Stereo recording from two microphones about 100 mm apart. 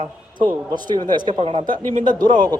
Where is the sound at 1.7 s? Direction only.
45° right (ahead or behind).